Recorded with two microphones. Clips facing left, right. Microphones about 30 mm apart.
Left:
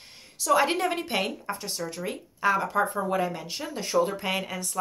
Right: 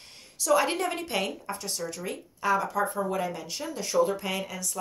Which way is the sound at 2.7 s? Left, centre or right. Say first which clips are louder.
Left 2 dB; left.